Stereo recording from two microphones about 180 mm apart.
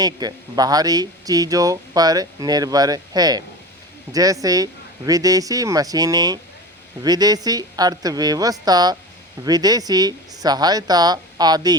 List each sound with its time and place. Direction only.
0.0 s speech: 20° right (ahead or behind)